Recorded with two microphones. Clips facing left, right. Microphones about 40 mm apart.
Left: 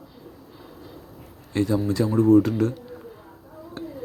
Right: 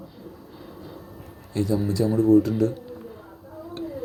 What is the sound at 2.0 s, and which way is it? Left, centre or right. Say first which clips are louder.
Speech: left 1 dB; left.